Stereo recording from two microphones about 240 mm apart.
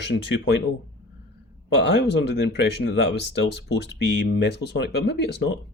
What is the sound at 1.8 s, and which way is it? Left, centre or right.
Speech, left.